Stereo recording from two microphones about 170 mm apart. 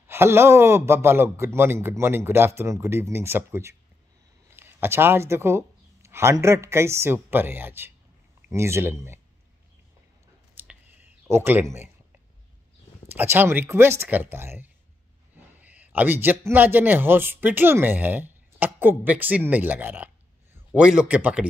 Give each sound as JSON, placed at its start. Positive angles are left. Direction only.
{"t": 0.0, "sound": "speech", "side_deg": -15}
{"t": 10.6, "sound": "clicking", "side_deg": -10}
{"t": 13.1, "sound": "speech", "side_deg": -10}